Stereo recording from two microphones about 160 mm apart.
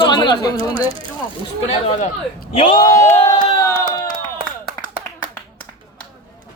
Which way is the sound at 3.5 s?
20° left (ahead or behind).